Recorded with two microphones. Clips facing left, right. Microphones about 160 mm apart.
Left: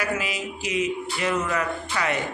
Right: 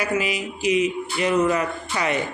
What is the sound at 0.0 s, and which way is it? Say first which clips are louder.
Speech: right 4 dB; 15° right (ahead or behind).